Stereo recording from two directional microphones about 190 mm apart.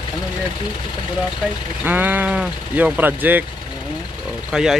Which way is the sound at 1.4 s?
Centre (ahead or behind).